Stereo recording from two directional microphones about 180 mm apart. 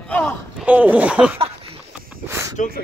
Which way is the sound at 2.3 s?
15° right (ahead or behind).